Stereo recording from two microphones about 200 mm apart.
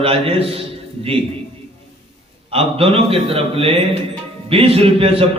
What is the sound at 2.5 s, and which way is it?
A man's voice, 30° right (ahead or behind).